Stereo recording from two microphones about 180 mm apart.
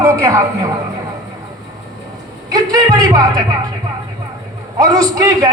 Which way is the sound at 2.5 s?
20° right (ahead or behind).